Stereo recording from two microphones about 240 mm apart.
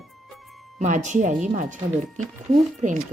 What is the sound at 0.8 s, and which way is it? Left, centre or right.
Speech, right.